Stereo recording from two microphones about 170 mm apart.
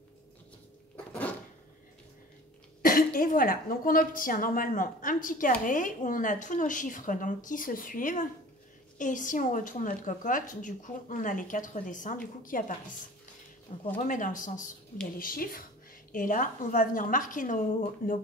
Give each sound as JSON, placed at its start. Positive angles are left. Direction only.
{"t": 0.9, "sound": "cupboard open or close", "side_deg": 10}
{"t": 2.8, "sound": "a woman's voice", "side_deg": 55}